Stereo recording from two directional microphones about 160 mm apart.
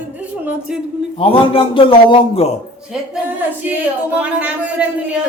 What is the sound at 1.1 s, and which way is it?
A man's voice, 35° left (ahead or behind).